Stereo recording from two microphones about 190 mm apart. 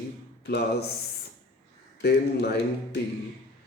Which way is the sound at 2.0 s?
60° left (ahead or behind).